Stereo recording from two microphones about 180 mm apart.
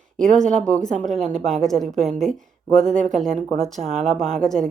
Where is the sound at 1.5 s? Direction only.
Centre (ahead or behind).